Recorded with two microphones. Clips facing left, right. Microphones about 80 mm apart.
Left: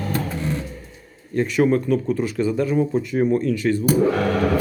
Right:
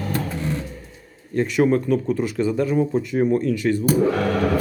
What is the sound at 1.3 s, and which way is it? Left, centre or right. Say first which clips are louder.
Speech: even; right.